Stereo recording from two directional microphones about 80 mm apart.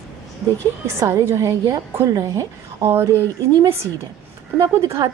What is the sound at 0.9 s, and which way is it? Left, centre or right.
Speech, right.